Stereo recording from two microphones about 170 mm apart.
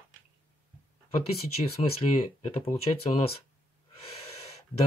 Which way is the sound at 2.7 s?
35° left (ahead or behind).